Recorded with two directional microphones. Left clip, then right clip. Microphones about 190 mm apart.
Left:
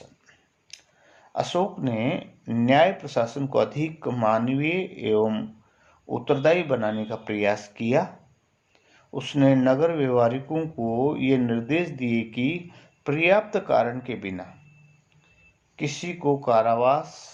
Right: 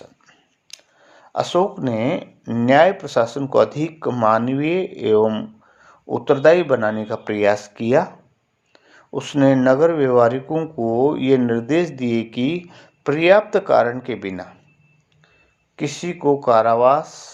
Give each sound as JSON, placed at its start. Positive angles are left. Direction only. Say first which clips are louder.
{"t": 0.3, "sound": "speech", "louder": "right 5 dB", "side_deg": -35}
{"t": 15.7, "sound": "speech", "louder": "right 5 dB", "side_deg": -35}